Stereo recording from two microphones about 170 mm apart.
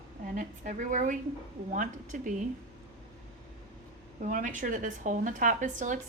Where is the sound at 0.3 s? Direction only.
50° right (ahead or behind).